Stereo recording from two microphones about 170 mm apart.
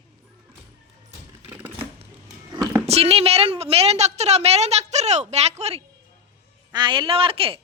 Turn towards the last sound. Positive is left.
turn(degrees=-35)  # may be behind; listen again after turning